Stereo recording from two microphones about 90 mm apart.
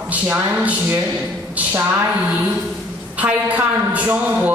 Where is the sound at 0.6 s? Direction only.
20° right (ahead or behind).